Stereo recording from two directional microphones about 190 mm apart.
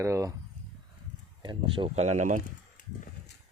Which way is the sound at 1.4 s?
25° right (ahead or behind).